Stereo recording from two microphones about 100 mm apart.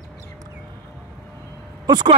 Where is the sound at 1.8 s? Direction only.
45° right (ahead or behind).